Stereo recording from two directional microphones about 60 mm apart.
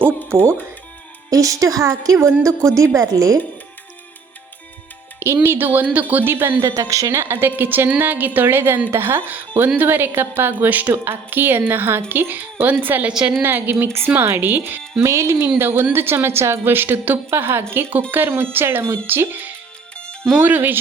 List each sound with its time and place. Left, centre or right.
1.3 s a woman's voice: right
5.2 s a woman's voice: right
6.6 s a woman's voice: right
7.1 s a woman's voice: right
11.0 s a woman's voice: right
13.1 s a woman's voice: centre
13.4 s a woman's voice: right
15.0 s speech: right
15.5 s a woman's voice: right